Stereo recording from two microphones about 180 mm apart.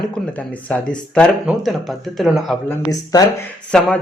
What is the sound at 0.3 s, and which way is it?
Speech, 5° left (ahead or behind).